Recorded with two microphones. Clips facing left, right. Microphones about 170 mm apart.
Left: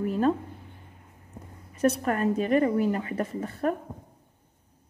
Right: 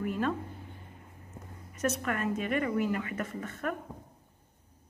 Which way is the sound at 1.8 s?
35° left (ahead or behind).